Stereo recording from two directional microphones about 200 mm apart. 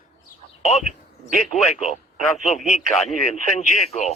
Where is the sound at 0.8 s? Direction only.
40° right (ahead or behind).